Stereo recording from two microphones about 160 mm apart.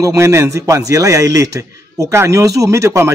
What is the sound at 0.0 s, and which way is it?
A man's voice, 20° right (ahead or behind).